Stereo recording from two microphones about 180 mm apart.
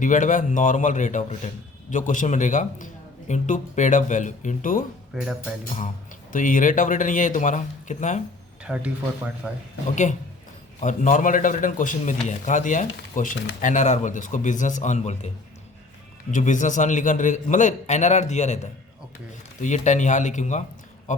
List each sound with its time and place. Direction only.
0.0 s speech: 45° left (ahead or behind)
5.1 s speech: 5° right (ahead or behind)
6.3 s speech: 45° left (ahead or behind)
8.6 s speech: 5° right (ahead or behind)
9.9 s speech: 45° left (ahead or behind)
16.3 s speech: 45° left (ahead or behind)